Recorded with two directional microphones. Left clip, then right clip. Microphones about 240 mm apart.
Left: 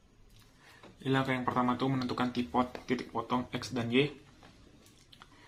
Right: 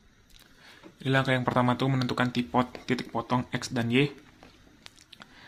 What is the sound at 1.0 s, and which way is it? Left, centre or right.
Speech, right.